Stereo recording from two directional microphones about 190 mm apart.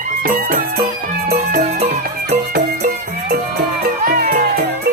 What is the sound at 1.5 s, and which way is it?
Music, 40° right (ahead or behind).